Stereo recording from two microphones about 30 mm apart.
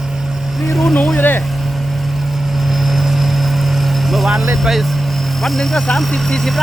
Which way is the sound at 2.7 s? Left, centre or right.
Centre.